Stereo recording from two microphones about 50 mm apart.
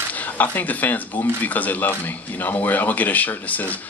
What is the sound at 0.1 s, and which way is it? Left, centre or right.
A man's voice, left.